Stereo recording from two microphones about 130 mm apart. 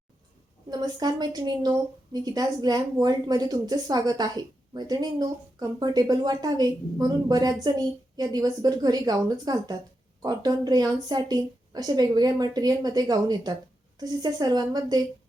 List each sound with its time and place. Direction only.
0.7 s a woman's voice: 30° right (ahead or behind)